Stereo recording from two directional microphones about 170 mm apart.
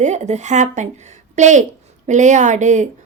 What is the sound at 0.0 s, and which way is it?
A woman's voice, 40° right (ahead or behind).